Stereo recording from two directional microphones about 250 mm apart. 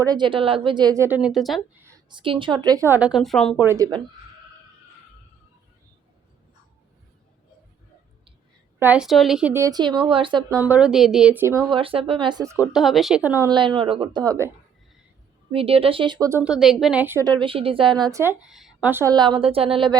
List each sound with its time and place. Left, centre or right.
0.0 s a woman's voice: centre
1.9 s a woman's voice: centre
3.7 s a woman's voice: centre
8.8 s a woman's voice: centre
10.6 s a woman's voice: centre
15.5 s a woman's voice: right